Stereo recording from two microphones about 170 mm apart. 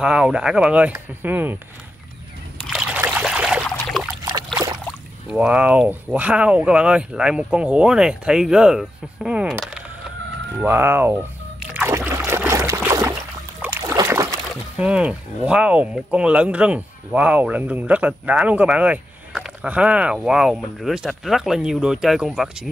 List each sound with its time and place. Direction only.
0.0 s speech: 5° right (ahead or behind)
2.6 s a sound: 5° right (ahead or behind)
5.3 s speech: 5° right (ahead or behind)
10.6 s speech: 15° right (ahead or behind)
11.7 s music: 10° right (ahead or behind)
12.3 s a sound: 15° right (ahead or behind)
13.6 s boat: 15° right (ahead or behind)
14.5 s speech: 5° right (ahead or behind)